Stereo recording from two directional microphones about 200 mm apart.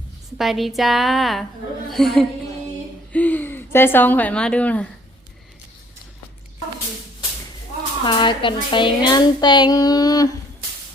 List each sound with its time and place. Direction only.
0.3 s a woman's voice: centre (ahead or behind)
8.0 s child singing: 25° left (ahead or behind)